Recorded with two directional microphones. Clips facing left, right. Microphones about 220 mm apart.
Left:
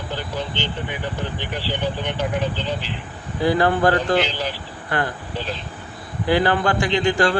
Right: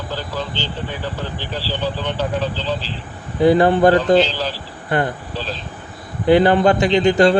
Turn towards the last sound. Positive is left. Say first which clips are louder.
# right 6 dB
turn(degrees=-20)  # may be behind; listen again after turning